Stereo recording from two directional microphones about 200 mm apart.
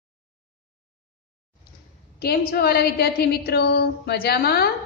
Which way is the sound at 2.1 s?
50° left (ahead or behind).